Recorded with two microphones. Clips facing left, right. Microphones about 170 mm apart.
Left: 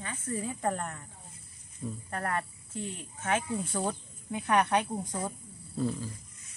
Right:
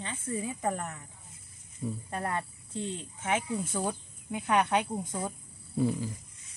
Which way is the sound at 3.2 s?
10° right (ahead or behind).